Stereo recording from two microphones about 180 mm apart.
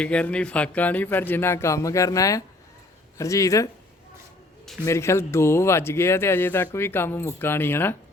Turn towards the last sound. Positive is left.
turn(degrees=10)  # may be behind; listen again after turning